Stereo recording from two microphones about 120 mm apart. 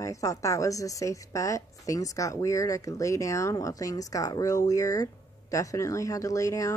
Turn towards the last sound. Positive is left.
turn(degrees=25)  # may be behind; listen again after turning